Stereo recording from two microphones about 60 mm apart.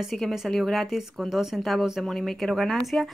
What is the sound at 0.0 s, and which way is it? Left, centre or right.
A woman's voice, centre.